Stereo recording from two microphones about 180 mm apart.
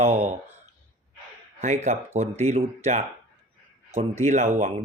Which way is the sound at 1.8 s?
40° right (ahead or behind).